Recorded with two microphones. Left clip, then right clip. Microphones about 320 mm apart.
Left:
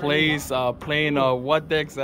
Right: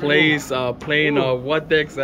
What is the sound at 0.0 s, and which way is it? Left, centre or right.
A man's voice, centre.